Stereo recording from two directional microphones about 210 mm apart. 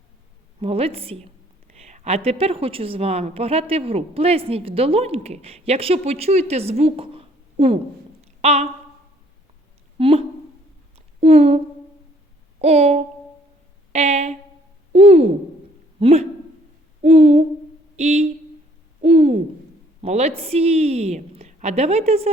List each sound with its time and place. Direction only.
0.6 s a woman's voice: 30° right (ahead or behind)
8.2 s a sound: 30° right (ahead or behind)
10.0 s speech: 25° right (ahead or behind)
10.9 s a sound: 30° right (ahead or behind)
12.6 s a woman's voice: 30° right (ahead or behind)
13.9 s a sound: 35° right (ahead or behind)
14.9 s owl: 30° right (ahead or behind)
16.0 s a man's voice: 30° right (ahead or behind)
17.0 s hoot: 30° right (ahead or behind)
17.9 s speech: 30° right (ahead or behind)
19.0 s hoot: 30° right (ahead or behind)
20.0 s a woman's voice: 30° right (ahead or behind)